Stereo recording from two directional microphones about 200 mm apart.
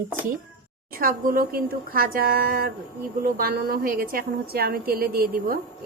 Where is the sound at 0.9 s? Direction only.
45° right (ahead or behind).